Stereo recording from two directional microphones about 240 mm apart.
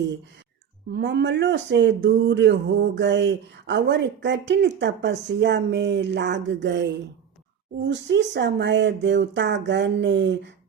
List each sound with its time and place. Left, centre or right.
0.9 s speech: right